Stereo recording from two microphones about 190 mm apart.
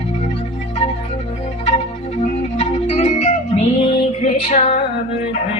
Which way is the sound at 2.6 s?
35° left (ahead or behind).